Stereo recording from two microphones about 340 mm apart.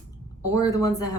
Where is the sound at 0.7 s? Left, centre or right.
Centre.